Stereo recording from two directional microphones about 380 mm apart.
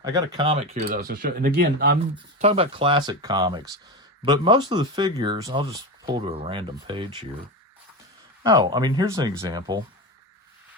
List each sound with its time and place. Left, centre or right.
0.0 s speech: centre
8.4 s speech: centre